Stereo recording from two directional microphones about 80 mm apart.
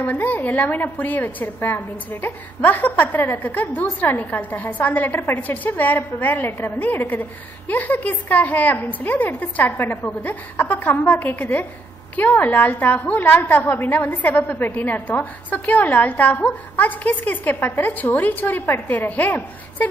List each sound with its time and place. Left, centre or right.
0.0 s a woman's voice: left